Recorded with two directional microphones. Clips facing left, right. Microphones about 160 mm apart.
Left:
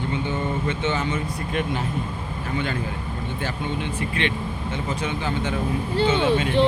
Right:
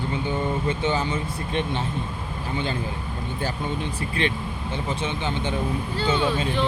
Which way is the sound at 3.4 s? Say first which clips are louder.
Right 1 dB; 35° right (ahead or behind).